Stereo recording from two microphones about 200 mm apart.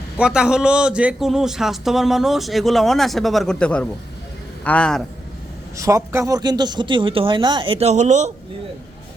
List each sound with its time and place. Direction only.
0.2 s a man's voice: 5° right (ahead or behind)
5.7 s speech: 15° right (ahead or behind); by 8.3 s 35° right (ahead or behind)